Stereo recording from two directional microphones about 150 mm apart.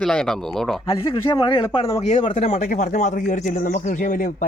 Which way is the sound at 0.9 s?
30° left (ahead or behind).